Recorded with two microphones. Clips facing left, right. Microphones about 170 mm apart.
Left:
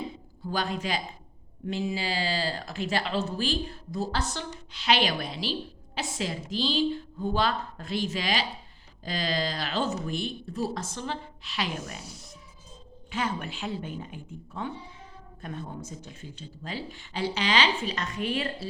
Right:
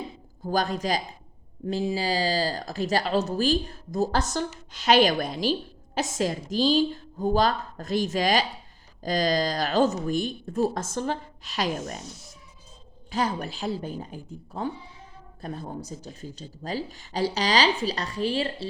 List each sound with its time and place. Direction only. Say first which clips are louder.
0.4 s speech: right 5 dB; 40° right (ahead or behind)
13.1 s speech: right 4 dB; 35° right (ahead or behind)